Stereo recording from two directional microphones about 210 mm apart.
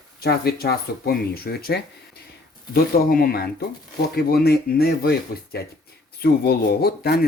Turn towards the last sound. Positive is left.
turn(degrees=50)  # may be behind; listen again after turning